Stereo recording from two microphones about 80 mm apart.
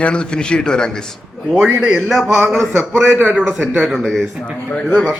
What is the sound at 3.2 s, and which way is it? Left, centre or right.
Speech, centre.